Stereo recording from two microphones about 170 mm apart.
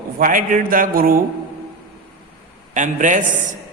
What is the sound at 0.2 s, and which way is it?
A man's voice, 50° right (ahead or behind).